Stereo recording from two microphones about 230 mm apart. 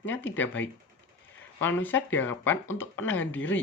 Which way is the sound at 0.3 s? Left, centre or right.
Centre.